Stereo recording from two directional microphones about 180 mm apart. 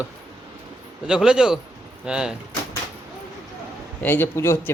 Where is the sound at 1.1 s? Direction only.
5° right (ahead or behind).